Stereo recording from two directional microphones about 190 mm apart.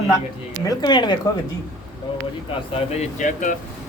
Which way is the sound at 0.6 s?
20° left (ahead or behind).